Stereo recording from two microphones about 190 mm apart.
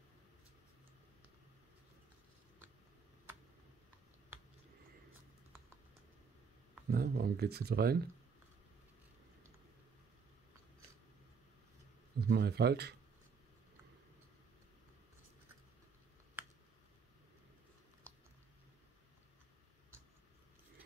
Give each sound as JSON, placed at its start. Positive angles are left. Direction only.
{"t": 6.9, "sound": "speech", "side_deg": -55}
{"t": 12.2, "sound": "speech", "side_deg": -60}
{"t": 16.4, "sound": "finger snapping", "side_deg": -10}